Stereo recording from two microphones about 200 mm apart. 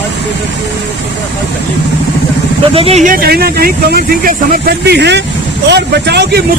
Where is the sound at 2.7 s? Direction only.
30° right (ahead or behind); by 6.4 s 55° right (ahead or behind).